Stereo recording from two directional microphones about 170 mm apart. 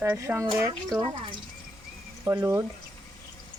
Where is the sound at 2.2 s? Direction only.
15° right (ahead or behind).